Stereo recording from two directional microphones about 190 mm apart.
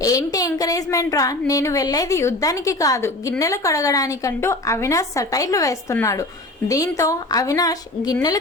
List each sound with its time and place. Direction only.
0.0 s a woman's voice: 20° left (ahead or behind)